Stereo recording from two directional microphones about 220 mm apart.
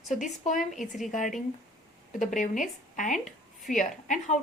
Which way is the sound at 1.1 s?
35° left (ahead or behind).